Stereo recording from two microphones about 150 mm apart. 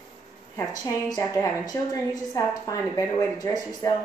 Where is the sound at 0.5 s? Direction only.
25° left (ahead or behind).